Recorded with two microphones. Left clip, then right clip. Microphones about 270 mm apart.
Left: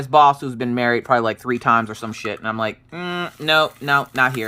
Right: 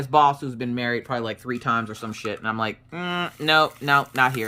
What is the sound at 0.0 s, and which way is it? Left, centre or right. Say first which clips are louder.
Speech: left 5 dB; centre.